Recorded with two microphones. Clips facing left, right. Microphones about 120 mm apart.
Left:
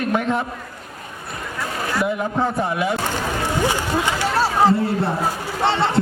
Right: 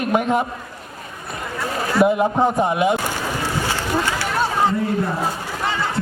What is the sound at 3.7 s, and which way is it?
Run, 15° left (ahead or behind).